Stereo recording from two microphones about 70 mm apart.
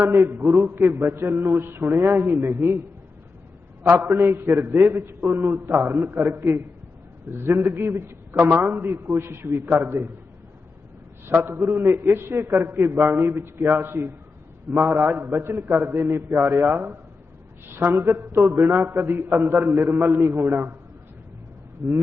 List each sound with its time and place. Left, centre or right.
0.0 s a man's voice: right
3.8 s a man's voice: right
11.3 s a man's voice: right